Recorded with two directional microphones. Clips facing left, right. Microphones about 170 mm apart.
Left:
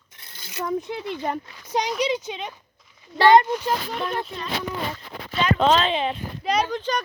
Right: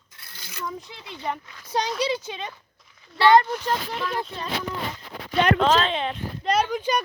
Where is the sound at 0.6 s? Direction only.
55° left (ahead or behind).